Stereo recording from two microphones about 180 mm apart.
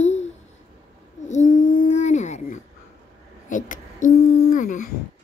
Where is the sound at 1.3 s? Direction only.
45° left (ahead or behind).